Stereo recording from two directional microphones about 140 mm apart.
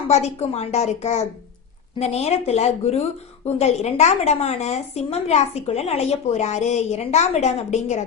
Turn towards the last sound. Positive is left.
turn(degrees=55)  # may be behind; listen again after turning